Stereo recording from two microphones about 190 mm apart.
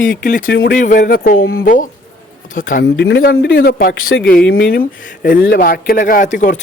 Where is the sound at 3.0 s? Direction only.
70° left (ahead or behind).